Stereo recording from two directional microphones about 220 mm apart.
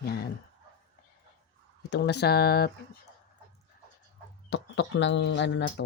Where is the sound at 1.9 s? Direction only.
50° left (ahead or behind).